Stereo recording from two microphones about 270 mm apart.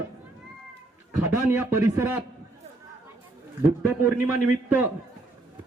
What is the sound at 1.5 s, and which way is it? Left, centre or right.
Speech, centre.